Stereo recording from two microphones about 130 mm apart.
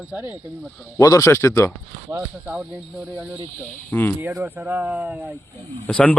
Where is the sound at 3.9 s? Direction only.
15° left (ahead or behind).